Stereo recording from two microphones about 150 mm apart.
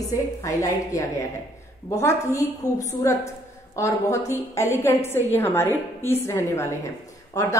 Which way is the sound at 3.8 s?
20° left (ahead or behind).